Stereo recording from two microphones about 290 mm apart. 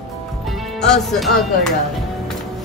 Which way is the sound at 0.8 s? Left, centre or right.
Centre.